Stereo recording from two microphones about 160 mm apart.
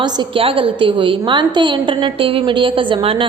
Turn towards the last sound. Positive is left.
turn(degrees=-35)  # may be behind; listen again after turning